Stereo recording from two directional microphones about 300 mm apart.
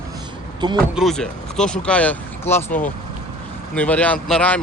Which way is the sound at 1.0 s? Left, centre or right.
Centre.